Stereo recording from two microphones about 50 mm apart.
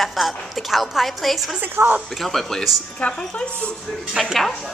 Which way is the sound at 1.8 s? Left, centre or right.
Right.